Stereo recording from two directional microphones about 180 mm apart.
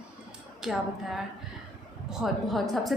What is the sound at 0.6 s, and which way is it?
Speech, centre (ahead or behind).